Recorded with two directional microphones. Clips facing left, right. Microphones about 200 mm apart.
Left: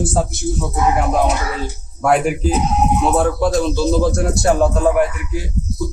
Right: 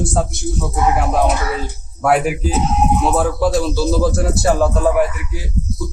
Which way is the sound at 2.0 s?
5° right (ahead or behind).